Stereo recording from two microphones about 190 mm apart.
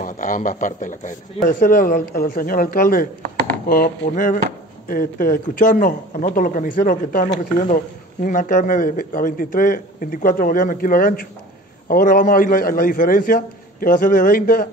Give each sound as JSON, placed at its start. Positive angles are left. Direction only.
{"t": 0.0, "sound": "a man's voice", "side_deg": 45}